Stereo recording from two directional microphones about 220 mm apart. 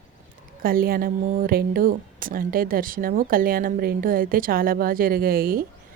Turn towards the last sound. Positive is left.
turn(degrees=-40)  # may be behind; listen again after turning